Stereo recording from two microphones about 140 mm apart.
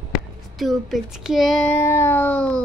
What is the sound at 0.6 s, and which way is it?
Speech, centre (ahead or behind).